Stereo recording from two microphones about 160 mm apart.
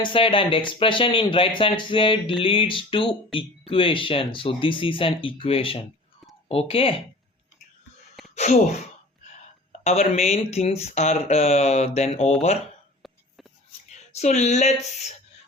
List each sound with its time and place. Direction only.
0.0 s speech: 35° left (ahead or behind)
8.4 s speech: 45° left (ahead or behind)
9.8 s speech: 40° left (ahead or behind)
13.9 s speech: 45° left (ahead or behind)